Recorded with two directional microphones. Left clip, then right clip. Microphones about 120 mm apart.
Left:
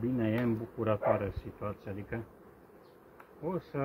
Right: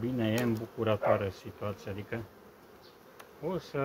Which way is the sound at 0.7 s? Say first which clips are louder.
Right 2 dB; 30° right (ahead or behind).